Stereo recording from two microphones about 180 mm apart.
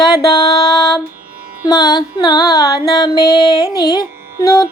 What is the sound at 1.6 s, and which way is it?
Music, 25° left (ahead or behind).